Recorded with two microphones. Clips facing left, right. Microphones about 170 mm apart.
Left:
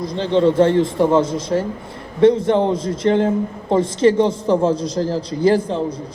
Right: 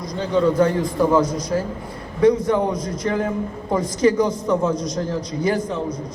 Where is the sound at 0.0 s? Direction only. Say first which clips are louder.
Left 3 dB; 30° left (ahead or behind).